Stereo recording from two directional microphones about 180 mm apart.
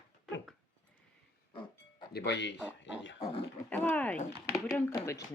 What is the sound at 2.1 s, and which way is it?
Speech, 70° left (ahead or behind).